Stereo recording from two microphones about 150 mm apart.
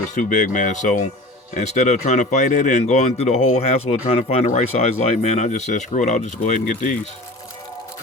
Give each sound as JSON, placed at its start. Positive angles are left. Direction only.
{"t": 0.1, "sound": "speech", "side_deg": 60}